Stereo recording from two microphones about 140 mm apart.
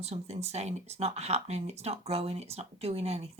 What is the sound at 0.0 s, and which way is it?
Speech, 50° right (ahead or behind).